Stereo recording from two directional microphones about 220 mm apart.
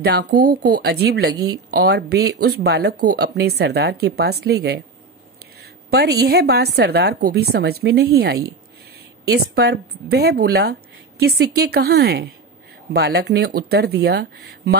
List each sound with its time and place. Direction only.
0.0 s speech: 45° right (ahead or behind)
5.9 s speech: 45° right (ahead or behind)